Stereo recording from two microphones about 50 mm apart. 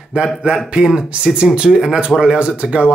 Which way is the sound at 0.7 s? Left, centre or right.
Centre.